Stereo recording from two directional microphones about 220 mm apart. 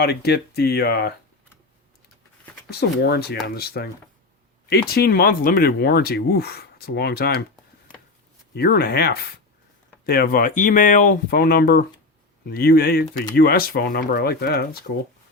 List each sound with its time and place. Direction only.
0.0 s speech: 45° left (ahead or behind)
2.6 s speech: 45° left (ahead or behind)
8.5 s speech: 45° left (ahead or behind)